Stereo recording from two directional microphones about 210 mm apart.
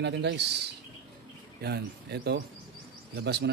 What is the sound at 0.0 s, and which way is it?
Speech, 55° right (ahead or behind).